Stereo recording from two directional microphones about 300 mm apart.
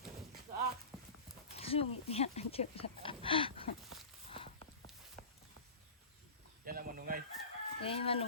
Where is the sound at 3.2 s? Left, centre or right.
Centre.